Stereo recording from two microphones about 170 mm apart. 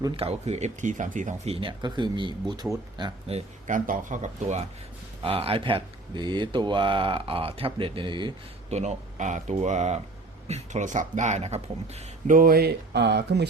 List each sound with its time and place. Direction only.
0.2 s speech: 40° right (ahead or behind)
1.6 s speech: 25° right (ahead or behind)
3.7 s speech: 50° right (ahead or behind); by 8.3 s 30° right (ahead or behind)
8.7 s speech: 40° right (ahead or behind)
12.4 s speech: 60° right (ahead or behind); by 13.5 s 80° right